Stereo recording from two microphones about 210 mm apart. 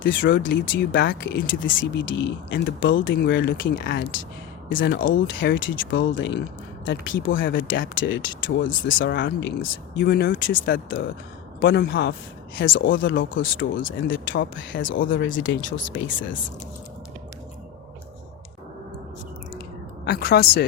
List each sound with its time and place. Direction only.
0.3 s speech: 60° left (ahead or behind)
3.2 s speech: 50° left (ahead or behind)
9.6 s speech: 45° left (ahead or behind)
12.5 s speech: 65° left (ahead or behind)
15.3 s speech: 40° left (ahead or behind)
20.1 s speech: 50° left (ahead or behind)